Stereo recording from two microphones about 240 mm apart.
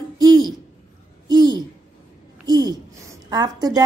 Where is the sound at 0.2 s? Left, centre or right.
Centre.